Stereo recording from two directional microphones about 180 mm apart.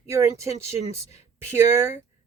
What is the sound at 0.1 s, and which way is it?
Speech, 15° right (ahead or behind).